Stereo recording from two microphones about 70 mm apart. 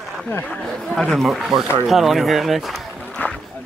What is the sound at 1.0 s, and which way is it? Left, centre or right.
Speech, centre.